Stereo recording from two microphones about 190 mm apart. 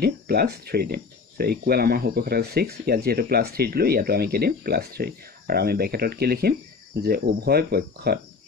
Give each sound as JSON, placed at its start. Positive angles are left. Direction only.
{"t": 0.0, "sound": "speech", "side_deg": -55}